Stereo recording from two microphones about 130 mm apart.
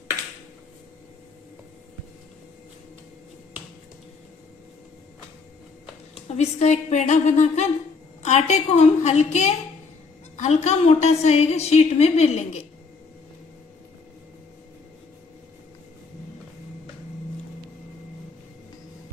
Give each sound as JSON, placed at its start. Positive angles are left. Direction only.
{"t": 6.2, "sound": "a woman's voice", "side_deg": 55}